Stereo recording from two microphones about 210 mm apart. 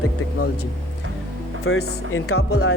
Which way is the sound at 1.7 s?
85° left.